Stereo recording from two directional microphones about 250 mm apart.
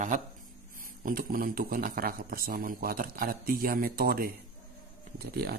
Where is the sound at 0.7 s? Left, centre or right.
Right.